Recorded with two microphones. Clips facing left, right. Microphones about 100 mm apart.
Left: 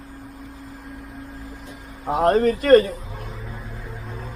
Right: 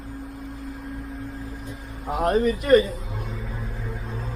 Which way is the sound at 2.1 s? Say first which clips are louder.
Left 4 dB; 40° left (ahead or behind).